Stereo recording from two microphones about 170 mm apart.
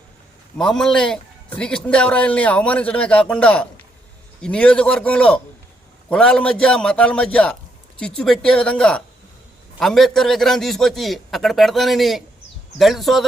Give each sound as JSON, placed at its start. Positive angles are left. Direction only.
{"t": 0.5, "sound": "a man's voice", "side_deg": 5}